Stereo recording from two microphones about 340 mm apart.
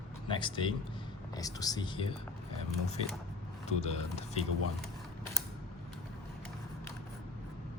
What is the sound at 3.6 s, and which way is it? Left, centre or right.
Speech, centre.